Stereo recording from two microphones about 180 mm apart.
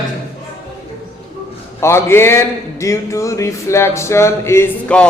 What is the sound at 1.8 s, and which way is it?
A man's voice, 15° left (ahead or behind).